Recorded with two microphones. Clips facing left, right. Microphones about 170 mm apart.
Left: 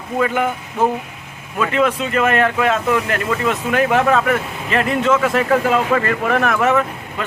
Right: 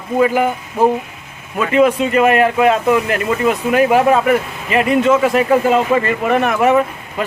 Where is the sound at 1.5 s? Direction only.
5° right (ahead or behind).